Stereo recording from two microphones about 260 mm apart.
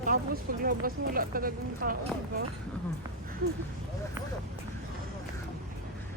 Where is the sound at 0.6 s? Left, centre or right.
Right.